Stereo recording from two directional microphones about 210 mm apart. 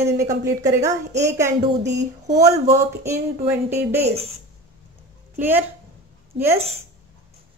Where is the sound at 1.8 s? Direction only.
55° right (ahead or behind).